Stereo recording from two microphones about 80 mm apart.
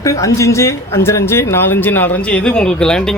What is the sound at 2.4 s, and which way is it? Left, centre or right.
Speech, centre.